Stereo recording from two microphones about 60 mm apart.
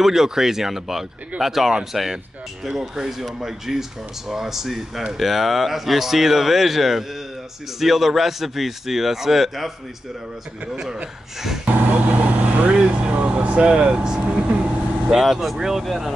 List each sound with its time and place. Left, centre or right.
0.0 s speech: centre
11.6 s vehicle: right
15.1 s speech: centre